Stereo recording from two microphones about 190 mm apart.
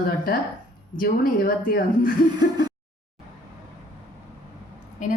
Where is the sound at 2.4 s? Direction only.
20° right (ahead or behind).